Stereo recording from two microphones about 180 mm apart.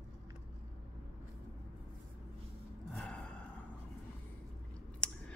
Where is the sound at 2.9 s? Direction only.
Centre (ahead or behind).